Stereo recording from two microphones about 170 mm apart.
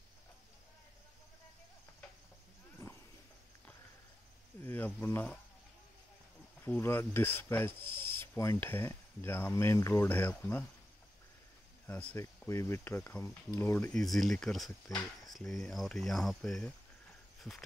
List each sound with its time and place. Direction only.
2.8 s vehicle: 15° left (ahead or behind)
4.6 s speech: 10° left (ahead or behind)
6.6 s a sound: 15° left (ahead or behind)
11.9 s a sound: 10° left (ahead or behind)
13.6 s speech: 10° left (ahead or behind)
17.4 s walk: centre (ahead or behind)